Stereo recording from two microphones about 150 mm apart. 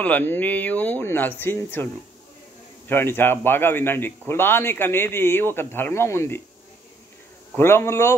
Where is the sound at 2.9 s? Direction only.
15° left (ahead or behind).